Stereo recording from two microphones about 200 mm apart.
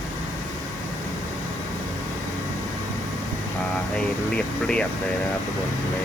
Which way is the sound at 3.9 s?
5° left (ahead or behind).